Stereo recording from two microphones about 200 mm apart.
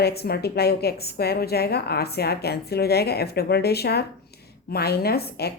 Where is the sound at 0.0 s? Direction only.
50° left (ahead or behind).